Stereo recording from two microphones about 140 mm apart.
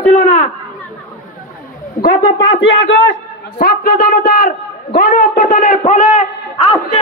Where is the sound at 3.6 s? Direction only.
90° left; by 6.3 s 70° left (ahead or behind).